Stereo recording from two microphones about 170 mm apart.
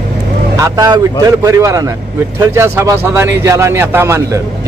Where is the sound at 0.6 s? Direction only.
20° right (ahead or behind).